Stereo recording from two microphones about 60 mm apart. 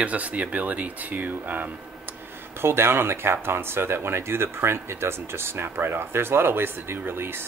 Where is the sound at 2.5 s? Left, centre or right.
Right.